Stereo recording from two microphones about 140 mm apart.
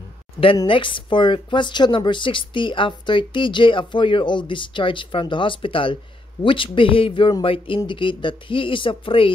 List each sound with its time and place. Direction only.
0.7 s a woman's voice: 35° left (ahead or behind)